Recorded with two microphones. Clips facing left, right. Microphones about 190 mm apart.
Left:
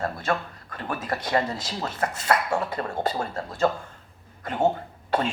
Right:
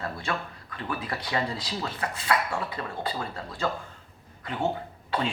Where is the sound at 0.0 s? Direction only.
45° left (ahead or behind).